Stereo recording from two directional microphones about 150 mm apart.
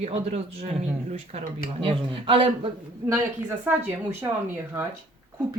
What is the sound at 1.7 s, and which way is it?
Speech, 35° right (ahead or behind).